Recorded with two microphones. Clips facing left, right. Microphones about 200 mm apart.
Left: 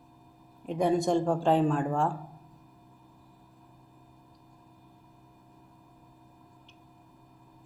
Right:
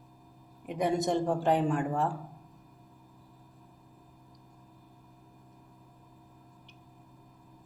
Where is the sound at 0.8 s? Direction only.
20° right (ahead or behind).